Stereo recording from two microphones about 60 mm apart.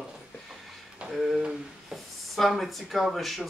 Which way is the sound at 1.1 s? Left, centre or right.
Centre.